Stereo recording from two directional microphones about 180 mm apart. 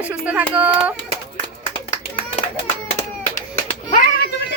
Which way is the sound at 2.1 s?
30° left (ahead or behind).